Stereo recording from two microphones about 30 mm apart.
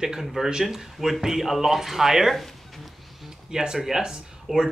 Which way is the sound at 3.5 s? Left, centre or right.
Right.